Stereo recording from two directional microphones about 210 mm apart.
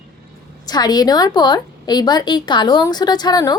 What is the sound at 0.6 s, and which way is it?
A woman's voice, 20° left (ahead or behind).